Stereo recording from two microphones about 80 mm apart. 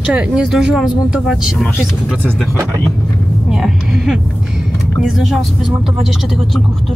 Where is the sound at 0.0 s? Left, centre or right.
Centre.